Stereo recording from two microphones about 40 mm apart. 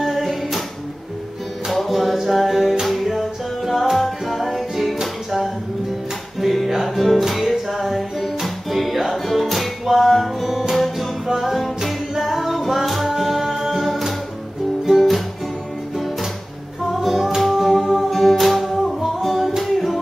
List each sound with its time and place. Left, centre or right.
0.0 s music: centre
1.7 s music: centre
6.7 s music: centre
16.9 s music: centre